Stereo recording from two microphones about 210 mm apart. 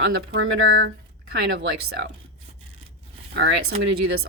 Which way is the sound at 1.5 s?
45° right (ahead or behind).